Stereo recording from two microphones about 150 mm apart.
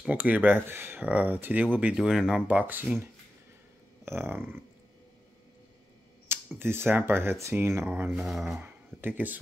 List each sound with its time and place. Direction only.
0.0 s speech: 10° right (ahead or behind)
6.2 s speech: 15° right (ahead or behind)
8.1 s speech: centre (ahead or behind)
8.6 s a sound: 15° right (ahead or behind)